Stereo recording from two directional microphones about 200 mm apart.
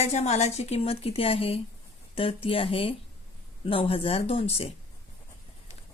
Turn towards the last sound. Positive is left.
turn(degrees=30)  # may be behind; listen again after turning